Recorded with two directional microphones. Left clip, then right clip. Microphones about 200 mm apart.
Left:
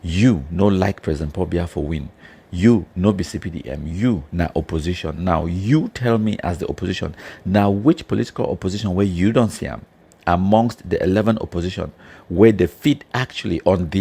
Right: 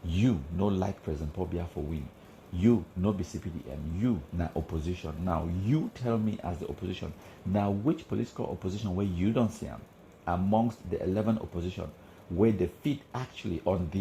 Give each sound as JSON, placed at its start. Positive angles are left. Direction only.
{"t": 0.1, "sound": "speech", "side_deg": 45}